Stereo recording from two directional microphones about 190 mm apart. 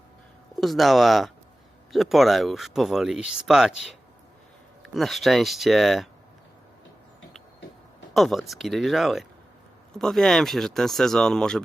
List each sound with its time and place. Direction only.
0.6 s speech: centre (ahead or behind)
4.8 s speech: centre (ahead or behind)
8.1 s speech: centre (ahead or behind)